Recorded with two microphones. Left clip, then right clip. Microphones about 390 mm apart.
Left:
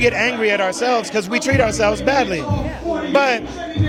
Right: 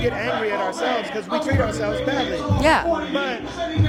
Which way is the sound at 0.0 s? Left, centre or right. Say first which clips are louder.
Left 6 dB; left.